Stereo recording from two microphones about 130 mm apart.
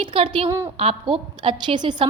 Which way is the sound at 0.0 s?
40° right (ahead or behind).